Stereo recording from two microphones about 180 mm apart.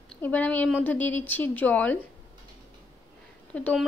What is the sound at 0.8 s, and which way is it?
A woman's voice, 10° left (ahead or behind).